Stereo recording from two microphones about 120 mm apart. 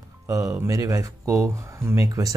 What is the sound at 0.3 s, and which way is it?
Speech, 25° right (ahead or behind).